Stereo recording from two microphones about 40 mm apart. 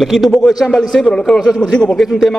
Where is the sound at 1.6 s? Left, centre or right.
Centre.